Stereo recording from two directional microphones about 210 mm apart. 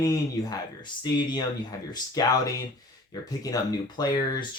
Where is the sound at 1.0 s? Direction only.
20° left (ahead or behind).